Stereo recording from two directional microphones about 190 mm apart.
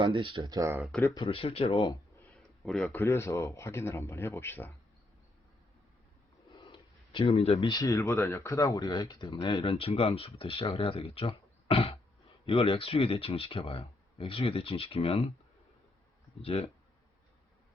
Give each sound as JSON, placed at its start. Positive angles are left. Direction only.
{"t": 0.0, "sound": "speech", "side_deg": -25}
{"t": 0.8, "sound": "a man's voice", "side_deg": 0}
{"t": 1.0, "sound": "speech", "side_deg": 25}
{"t": 2.6, "sound": "a man's voice", "side_deg": 0}
{"t": 3.0, "sound": "a man's voice", "side_deg": 15}
{"t": 6.6, "sound": "a sound", "side_deg": 25}
{"t": 7.7, "sound": "speech", "side_deg": 20}
{"t": 16.4, "sound": "speech", "side_deg": 30}